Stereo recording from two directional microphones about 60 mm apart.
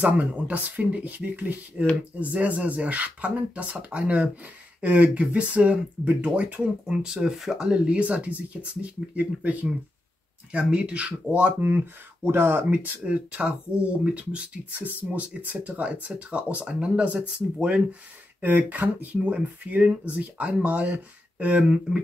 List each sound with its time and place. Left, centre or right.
0.0 s speech: right
6.9 s speech: centre; by 11.8 s right
12.2 s speech: right
12.6 s speech: right
14.7 s speech: right